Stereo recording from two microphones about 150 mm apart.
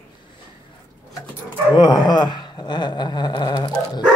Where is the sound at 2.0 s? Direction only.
30° left (ahead or behind).